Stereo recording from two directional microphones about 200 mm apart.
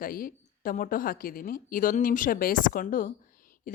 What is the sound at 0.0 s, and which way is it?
A woman's voice, 45° left (ahead or behind).